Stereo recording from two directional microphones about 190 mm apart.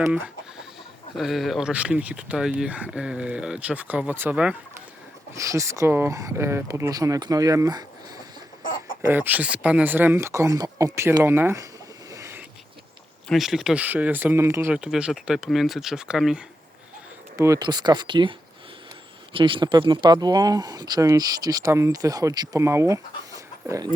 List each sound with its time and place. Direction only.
1.1 s speech: centre (ahead or behind); by 8.2 s 20° right (ahead or behind)
8.6 s chicken: 45° left (ahead or behind)
9.0 s speech: 10° right (ahead or behind)
12.1 s a sound: 15° right (ahead or behind)
13.2 s speech: centre (ahead or behind)
17.3 s speech: 15° right (ahead or behind)